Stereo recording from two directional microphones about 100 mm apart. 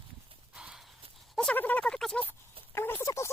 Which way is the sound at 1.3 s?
5° left (ahead or behind).